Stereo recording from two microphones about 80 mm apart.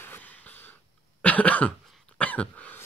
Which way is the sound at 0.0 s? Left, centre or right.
Left.